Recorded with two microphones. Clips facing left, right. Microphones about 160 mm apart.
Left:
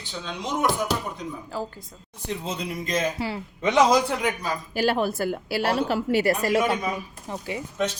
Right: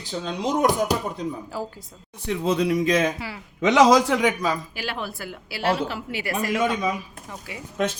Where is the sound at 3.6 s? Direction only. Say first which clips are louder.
Right 3 dB; 90° right.